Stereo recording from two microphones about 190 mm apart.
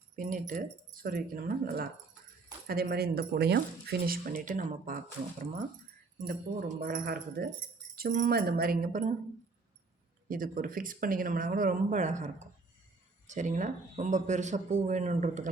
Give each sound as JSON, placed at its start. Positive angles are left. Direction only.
{"t": 0.2, "sound": "speech", "side_deg": -45}
{"t": 6.1, "sound": "speech", "side_deg": -45}
{"t": 10.2, "sound": "a man's voice", "side_deg": -45}